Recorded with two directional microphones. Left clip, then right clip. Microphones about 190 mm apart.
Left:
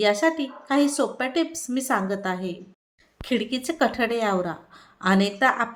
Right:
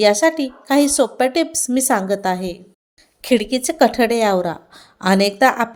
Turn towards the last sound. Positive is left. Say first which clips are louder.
# right 7 dB
turn(degrees=-40)  # may be behind; listen again after turning